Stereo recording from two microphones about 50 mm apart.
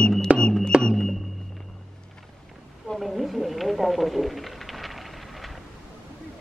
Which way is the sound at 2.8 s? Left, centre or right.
Centre.